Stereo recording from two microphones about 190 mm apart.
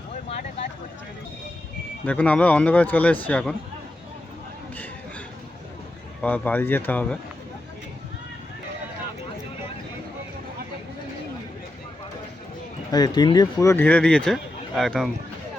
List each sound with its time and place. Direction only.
0.1 s vehicle: 40° left (ahead or behind)
2.0 s speech: 5° left (ahead or behind)
6.2 s speech: 10° left (ahead or behind)
12.9 s speech: 20° left (ahead or behind); by 15.1 s centre (ahead or behind)